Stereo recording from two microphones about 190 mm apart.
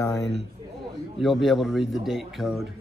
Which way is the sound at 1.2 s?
Centre (ahead or behind).